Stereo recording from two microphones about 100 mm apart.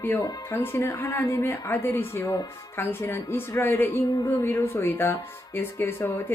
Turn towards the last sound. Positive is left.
turn(degrees=25)  # may be behind; listen again after turning